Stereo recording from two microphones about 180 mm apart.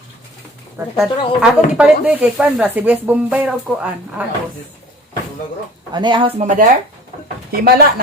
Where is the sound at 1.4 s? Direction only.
5° right (ahead or behind).